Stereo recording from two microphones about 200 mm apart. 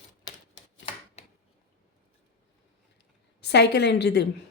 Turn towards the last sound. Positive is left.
turn(degrees=55)  # may be behind; listen again after turning